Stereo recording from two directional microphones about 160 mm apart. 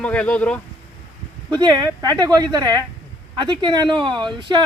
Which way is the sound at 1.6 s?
25° right (ahead or behind).